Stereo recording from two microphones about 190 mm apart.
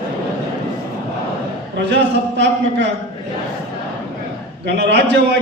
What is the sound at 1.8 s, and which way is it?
A man's voice, 65° right (ahead or behind).